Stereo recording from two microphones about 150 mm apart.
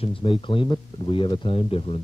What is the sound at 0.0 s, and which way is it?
Speech, 35° left (ahead or behind).